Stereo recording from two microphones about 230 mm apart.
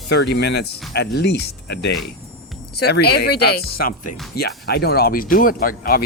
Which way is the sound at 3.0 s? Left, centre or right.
Left.